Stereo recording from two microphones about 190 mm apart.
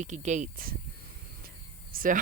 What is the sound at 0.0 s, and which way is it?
Speech, 40° right (ahead or behind).